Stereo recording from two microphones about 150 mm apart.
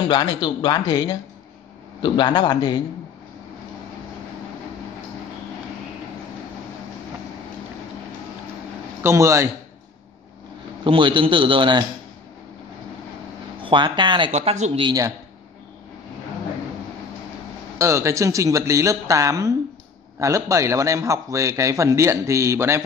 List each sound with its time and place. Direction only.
0.1 s speech: 30° left (ahead or behind)
9.0 s a man's voice: 20° right (ahead or behind)
10.8 s a man's voice: 35° right (ahead or behind)
13.6 s speech: 35° right (ahead or behind)
14.3 s speech: 45° right (ahead or behind)
14.8 s a man's voice: 25° right (ahead or behind)
17.7 s a man's voice: 20° right (ahead or behind)